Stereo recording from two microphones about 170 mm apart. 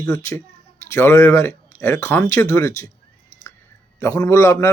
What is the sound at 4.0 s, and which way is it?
Speech, 15° left (ahead or behind).